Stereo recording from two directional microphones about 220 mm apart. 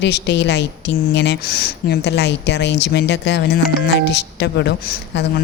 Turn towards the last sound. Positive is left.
turn(degrees=50)  # may be behind; listen again after turning